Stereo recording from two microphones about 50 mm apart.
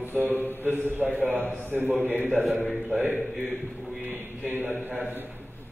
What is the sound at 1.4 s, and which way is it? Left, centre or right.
Speech, left.